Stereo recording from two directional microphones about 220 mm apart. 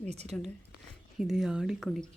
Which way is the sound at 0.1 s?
30° right (ahead or behind).